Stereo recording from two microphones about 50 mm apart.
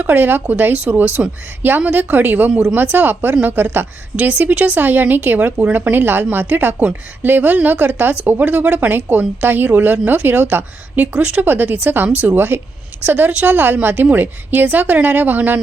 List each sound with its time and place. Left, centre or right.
0.0 s a woman's voice: right